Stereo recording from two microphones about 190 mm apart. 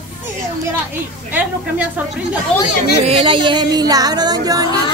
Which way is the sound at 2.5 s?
5° left (ahead or behind).